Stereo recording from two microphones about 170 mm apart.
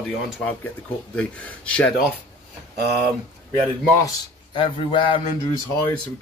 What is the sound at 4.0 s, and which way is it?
A man's voice, 25° left (ahead or behind).